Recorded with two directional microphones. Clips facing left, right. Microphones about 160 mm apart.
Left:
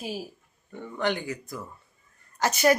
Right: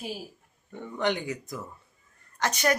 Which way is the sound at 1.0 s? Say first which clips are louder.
Even; 20° right (ahead or behind).